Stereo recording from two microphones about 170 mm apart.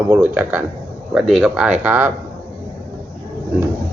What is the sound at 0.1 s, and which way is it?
Speech, 10° right (ahead or behind).